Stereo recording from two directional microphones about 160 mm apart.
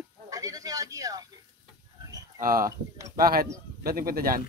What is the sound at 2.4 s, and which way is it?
Speech, 65° right (ahead or behind).